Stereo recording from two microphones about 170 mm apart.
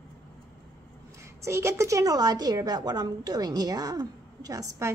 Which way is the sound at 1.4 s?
15° right (ahead or behind).